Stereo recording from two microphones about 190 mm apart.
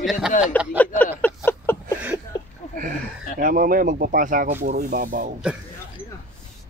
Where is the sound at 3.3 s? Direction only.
45° right (ahead or behind).